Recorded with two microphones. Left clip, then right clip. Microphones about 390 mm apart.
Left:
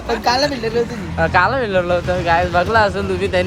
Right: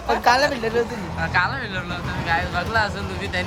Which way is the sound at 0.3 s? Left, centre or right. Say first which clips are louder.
Left 1 dB; centre.